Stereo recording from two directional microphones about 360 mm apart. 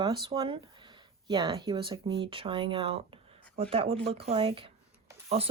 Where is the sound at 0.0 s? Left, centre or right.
Centre.